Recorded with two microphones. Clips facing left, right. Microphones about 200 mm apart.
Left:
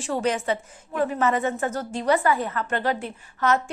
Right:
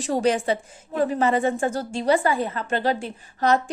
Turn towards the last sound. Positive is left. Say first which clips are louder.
# right 2 dB
turn(degrees=-35)  # may be behind; listen again after turning